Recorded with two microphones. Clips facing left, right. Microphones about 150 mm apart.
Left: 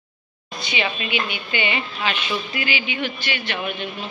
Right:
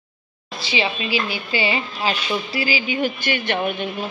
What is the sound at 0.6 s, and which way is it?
A woman's voice, 30° right (ahead or behind).